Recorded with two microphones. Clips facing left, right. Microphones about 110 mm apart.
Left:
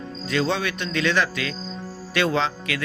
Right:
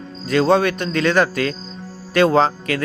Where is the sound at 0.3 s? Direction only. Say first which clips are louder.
Right 8 dB; 45° right (ahead or behind).